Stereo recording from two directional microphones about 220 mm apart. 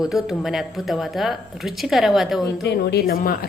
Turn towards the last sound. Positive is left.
turn(degrees=45)  # may be behind; listen again after turning